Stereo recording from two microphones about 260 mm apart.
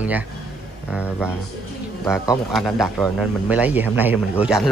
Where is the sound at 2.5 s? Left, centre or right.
Centre.